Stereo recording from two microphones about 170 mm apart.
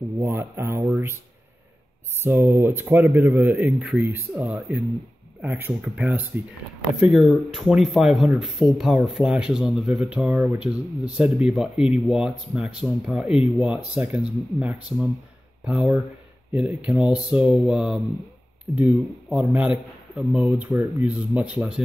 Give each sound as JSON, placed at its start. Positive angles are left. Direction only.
{"t": 0.2, "sound": "a man's voice", "side_deg": -15}
{"t": 2.2, "sound": "a man's voice", "side_deg": -15}